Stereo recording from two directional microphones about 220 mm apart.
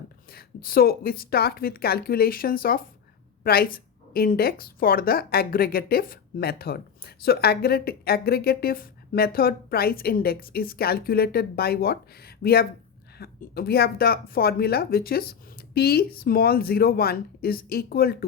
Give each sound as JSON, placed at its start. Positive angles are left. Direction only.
{"t": 0.3, "sound": "a woman's voice", "side_deg": 40}